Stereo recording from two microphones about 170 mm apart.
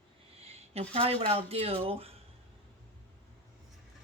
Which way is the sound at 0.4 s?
35° right (ahead or behind).